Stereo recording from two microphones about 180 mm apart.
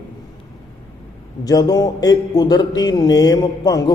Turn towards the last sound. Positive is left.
turn(degrees=20)  # may be behind; listen again after turning